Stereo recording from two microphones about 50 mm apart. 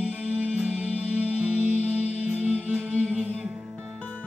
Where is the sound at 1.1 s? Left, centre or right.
Right.